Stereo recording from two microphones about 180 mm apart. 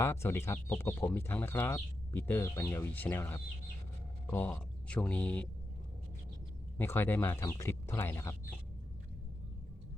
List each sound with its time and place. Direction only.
0.0 s speech: 15° left (ahead or behind)
6.7 s speech: 10° left (ahead or behind)